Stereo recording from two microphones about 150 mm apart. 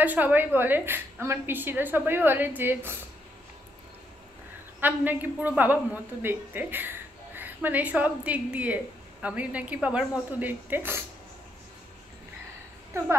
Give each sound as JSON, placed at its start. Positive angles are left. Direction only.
{"t": 0.0, "sound": "a woman's voice", "side_deg": -10}
{"t": 4.7, "sound": "a woman's voice", "side_deg": -10}